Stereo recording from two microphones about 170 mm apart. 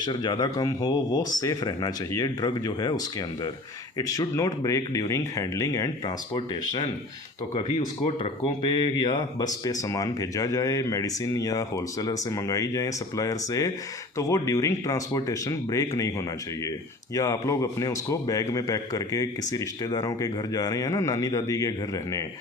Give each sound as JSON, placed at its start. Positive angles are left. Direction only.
{"t": 0.0, "sound": "speech", "side_deg": 25}
{"t": 8.4, "sound": "speech", "side_deg": 25}